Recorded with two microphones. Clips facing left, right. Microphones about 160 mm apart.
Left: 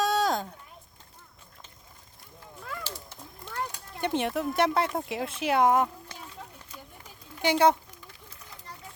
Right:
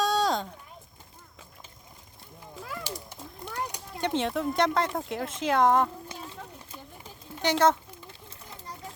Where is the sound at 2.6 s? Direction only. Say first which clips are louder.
Right 1 dB; 10° right (ahead or behind).